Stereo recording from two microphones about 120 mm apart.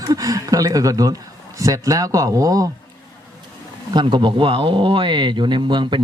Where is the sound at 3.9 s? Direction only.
40° right (ahead or behind).